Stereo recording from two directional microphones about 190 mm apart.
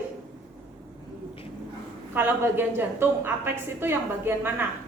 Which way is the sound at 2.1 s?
10° right (ahead or behind).